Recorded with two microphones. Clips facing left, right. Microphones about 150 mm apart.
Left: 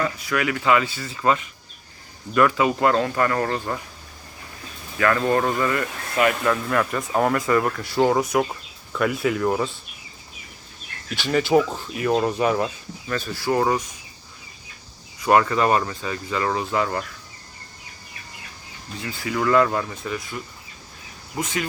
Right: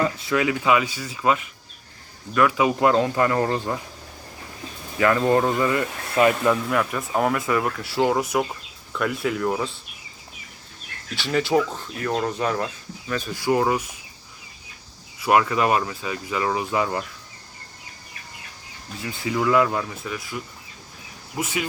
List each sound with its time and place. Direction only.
0.0 s speech: 25° right (ahead or behind); by 1.5 s 5° right (ahead or behind)
2.6 s speech: 15° right (ahead or behind)
4.9 s speech: 15° right (ahead or behind); by 9.6 s 5° left (ahead or behind)
11.1 s speech: centre (ahead or behind)
13.1 s speech: 15° right (ahead or behind)
15.2 s speech: 5° right (ahead or behind)
19.0 s speech: 20° right (ahead or behind)
19.4 s speech: 5° right (ahead or behind)